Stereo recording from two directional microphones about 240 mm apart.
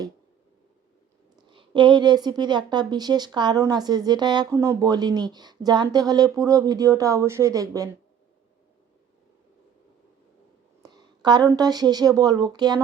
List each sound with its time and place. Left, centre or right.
1.5 s speech: centre
10.8 s speech: centre